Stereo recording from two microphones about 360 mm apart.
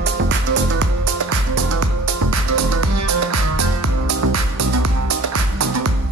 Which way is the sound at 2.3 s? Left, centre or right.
Right.